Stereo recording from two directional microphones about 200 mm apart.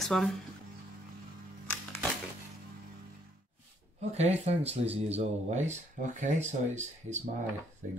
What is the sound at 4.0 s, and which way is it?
Speech, 35° right (ahead or behind).